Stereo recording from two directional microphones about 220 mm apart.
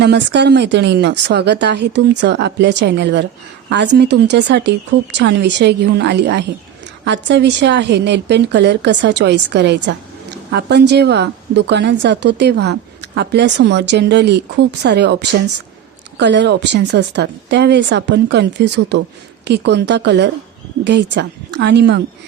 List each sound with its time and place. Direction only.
0.0 s a woman's voice: 50° right (ahead or behind)